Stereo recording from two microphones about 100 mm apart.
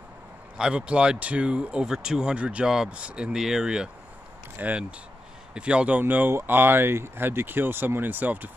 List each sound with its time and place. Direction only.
0.6 s speech: 10° right (ahead or behind)